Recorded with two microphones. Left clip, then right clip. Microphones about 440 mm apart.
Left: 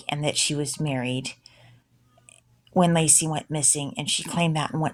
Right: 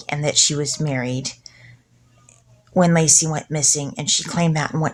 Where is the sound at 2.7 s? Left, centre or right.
Left.